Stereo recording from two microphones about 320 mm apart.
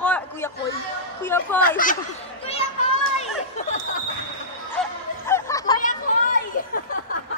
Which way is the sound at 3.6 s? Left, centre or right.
Left.